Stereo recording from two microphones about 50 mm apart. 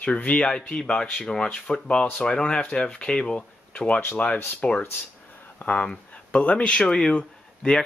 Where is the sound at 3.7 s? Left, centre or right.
Left.